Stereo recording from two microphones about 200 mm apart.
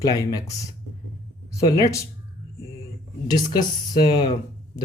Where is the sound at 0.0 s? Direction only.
20° left (ahead or behind).